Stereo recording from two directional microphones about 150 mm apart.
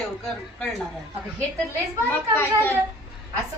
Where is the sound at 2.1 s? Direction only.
15° left (ahead or behind).